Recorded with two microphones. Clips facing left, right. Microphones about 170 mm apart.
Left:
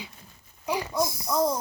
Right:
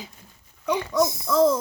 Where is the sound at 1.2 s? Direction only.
90° right.